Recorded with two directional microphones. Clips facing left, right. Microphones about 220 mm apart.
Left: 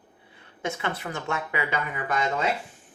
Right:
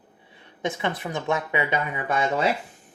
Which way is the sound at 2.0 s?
30° right (ahead or behind).